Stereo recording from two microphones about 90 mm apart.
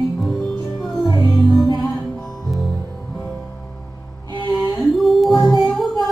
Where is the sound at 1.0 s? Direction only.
55° left (ahead or behind).